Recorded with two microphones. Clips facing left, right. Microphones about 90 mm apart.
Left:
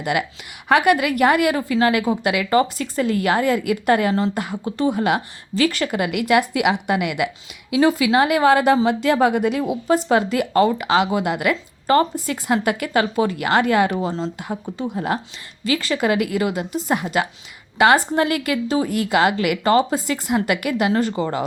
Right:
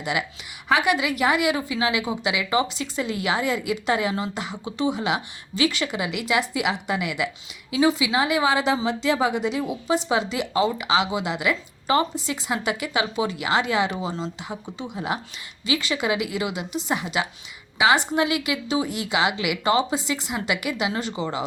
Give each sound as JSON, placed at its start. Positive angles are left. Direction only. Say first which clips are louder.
{"t": 0.0, "sound": "a woman's voice", "louder": "left 5 dB", "side_deg": 55}